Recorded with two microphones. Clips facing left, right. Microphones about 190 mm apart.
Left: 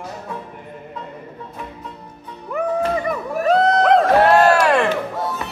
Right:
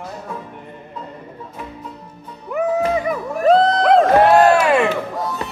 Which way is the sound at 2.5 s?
5° right (ahead or behind).